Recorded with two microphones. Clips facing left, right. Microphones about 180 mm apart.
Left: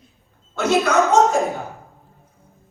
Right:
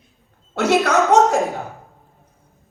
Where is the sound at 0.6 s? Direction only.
75° right (ahead or behind).